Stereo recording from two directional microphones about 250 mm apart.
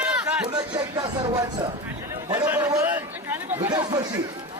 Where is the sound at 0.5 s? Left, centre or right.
Centre.